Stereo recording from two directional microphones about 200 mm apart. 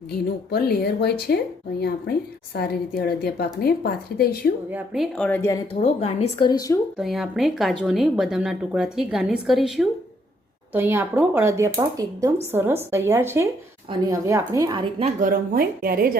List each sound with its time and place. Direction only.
0.5 s a woman's voice: 55° left (ahead or behind)
2.6 s a woman's voice: 50° left (ahead or behind)
4.7 s speech: centre (ahead or behind)
5.8 s a woman's voice: 30° left (ahead or behind)
6.9 s speech: centre (ahead or behind); by 15.0 s 20° right (ahead or behind)
15.0 s speech: 45° right (ahead or behind)